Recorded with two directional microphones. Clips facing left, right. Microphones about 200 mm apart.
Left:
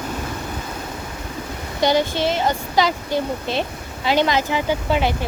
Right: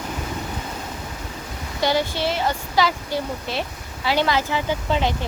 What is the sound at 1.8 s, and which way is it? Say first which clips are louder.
Speech: left 3 dB; 20° left (ahead or behind).